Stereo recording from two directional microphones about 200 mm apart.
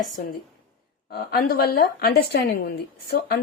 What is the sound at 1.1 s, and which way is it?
A woman's voice, 50° left (ahead or behind).